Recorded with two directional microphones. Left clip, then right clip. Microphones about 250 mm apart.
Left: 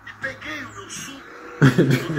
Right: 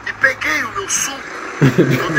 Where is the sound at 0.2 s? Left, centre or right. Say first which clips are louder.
Right 15 dB; right.